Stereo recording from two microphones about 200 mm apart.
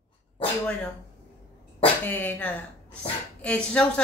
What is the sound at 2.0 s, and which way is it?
Speech, 10° left (ahead or behind).